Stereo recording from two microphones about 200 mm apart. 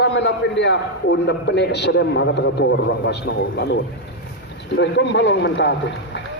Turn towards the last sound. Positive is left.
turn(degrees=65)  # may be behind; listen again after turning